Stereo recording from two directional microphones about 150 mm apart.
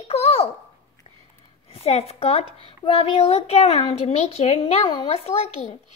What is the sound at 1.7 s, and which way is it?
A woman's voice, 45° left (ahead or behind).